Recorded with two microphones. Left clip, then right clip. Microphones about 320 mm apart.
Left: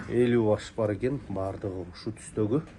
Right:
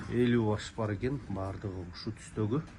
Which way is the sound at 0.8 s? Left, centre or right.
Left.